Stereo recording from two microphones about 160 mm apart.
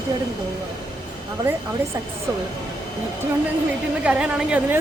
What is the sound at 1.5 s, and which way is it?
Speech, 10° right (ahead or behind).